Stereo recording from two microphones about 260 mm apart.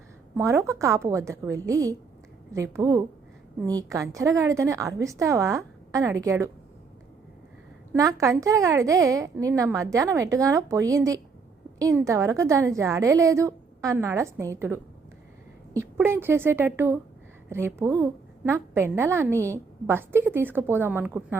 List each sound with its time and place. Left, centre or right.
0.3 s a woman's voice: centre
7.9 s a woman's voice: centre